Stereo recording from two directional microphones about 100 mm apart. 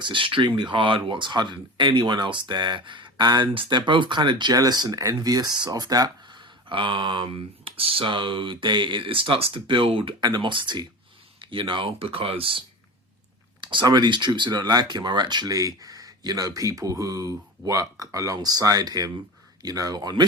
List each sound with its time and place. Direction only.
0.0 s speech: 55° right (ahead or behind)
13.6 s speech: 50° right (ahead or behind)